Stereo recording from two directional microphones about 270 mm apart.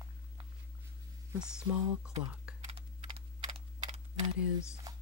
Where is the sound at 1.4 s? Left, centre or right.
Centre.